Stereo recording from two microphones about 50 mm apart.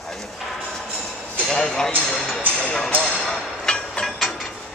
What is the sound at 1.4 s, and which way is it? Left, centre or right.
Speech, centre.